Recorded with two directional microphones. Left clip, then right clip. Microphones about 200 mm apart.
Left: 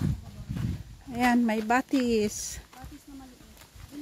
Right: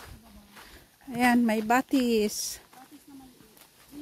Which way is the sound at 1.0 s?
15° right (ahead or behind).